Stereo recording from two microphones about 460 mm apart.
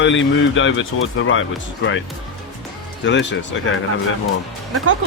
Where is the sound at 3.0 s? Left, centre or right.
Left.